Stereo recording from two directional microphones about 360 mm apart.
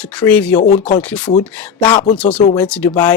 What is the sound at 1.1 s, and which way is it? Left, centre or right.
Speech, centre.